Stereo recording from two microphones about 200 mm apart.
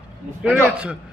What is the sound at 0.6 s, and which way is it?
Speech, 5° right (ahead or behind).